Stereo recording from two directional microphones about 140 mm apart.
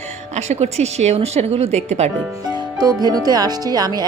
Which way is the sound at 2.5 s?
30° right (ahead or behind).